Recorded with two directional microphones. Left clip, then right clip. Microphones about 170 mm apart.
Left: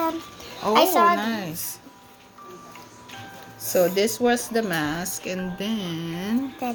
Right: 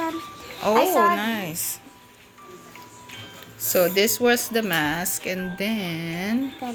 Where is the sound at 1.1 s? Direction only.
Centre (ahead or behind).